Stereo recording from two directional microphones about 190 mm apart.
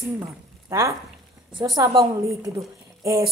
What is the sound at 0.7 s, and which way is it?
A woman's voice, 15° right (ahead or behind).